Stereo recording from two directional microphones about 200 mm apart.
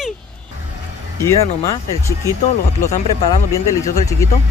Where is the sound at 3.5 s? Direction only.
15° left (ahead or behind).